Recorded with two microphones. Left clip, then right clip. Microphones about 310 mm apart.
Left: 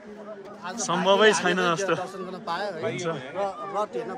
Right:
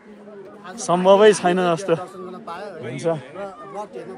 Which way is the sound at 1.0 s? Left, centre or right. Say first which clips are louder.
Right 6 dB; centre.